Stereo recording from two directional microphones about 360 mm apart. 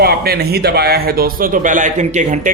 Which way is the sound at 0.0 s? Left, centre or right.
Right.